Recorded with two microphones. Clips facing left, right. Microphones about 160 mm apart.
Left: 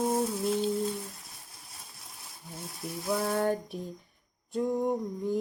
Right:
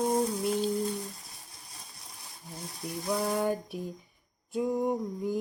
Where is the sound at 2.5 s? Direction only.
Centre (ahead or behind).